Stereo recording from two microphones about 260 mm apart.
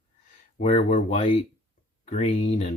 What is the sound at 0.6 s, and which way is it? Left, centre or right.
Speech, left.